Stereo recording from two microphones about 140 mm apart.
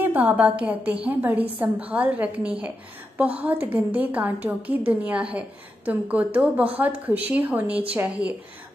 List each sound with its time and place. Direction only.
0.0 s a woman's voice: 10° right (ahead or behind)